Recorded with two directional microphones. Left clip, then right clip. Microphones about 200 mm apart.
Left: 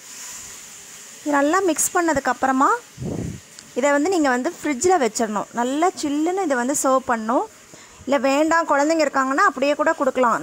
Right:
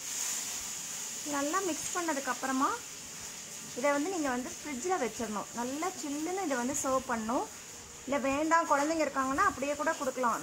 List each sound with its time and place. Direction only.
1.3 s speech: 50° left (ahead or behind)
3.8 s speech: 50° left (ahead or behind)